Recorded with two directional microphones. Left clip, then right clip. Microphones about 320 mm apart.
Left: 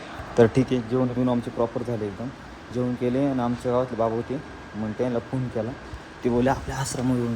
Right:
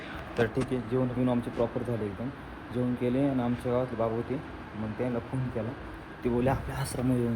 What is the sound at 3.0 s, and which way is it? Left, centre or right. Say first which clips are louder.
Speech: left 4 dB; centre.